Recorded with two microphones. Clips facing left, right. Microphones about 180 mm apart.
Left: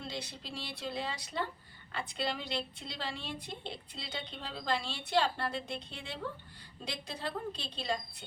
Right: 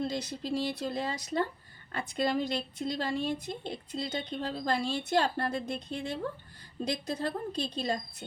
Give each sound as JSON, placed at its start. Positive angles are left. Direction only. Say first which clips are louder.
{"t": 0.0, "sound": "a woman's voice", "louder": "right 9 dB", "side_deg": -45}